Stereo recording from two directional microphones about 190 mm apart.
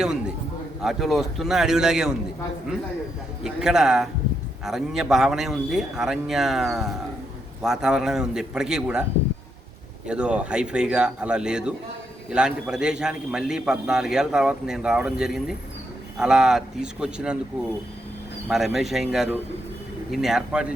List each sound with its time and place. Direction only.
0.8 s a man's voice: centre (ahead or behind)
3.4 s a man's voice: 5° right (ahead or behind)
10.1 s a man's voice: 5° right (ahead or behind)
18.4 s a man's voice: centre (ahead or behind)